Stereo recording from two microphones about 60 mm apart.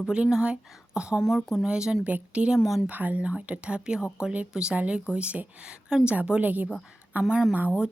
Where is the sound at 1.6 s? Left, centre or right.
Centre.